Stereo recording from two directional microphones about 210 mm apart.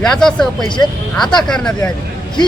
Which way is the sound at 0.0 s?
5° left (ahead or behind).